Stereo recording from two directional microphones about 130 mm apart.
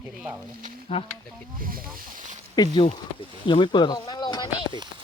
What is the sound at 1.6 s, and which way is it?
Speech, 90° right.